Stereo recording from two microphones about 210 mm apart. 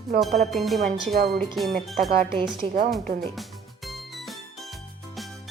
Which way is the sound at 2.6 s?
30° right (ahead or behind).